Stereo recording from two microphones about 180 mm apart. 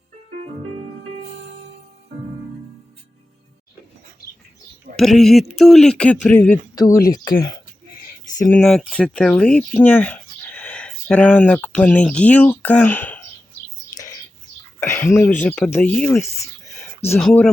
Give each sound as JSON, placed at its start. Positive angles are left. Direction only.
{"t": 4.9, "sound": "speech", "side_deg": 0}
{"t": 6.7, "sound": "speech", "side_deg": 20}
{"t": 7.0, "sound": "speech", "side_deg": 50}
{"t": 8.5, "sound": "speech", "side_deg": 5}
{"t": 14.8, "sound": "speech", "side_deg": 15}